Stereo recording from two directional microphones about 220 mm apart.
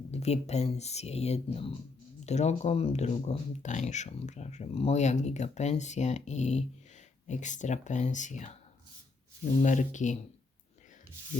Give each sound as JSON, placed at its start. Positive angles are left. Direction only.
{"t": 0.1, "sound": "speech", "side_deg": 30}
{"t": 9.6, "sound": "speech", "side_deg": 35}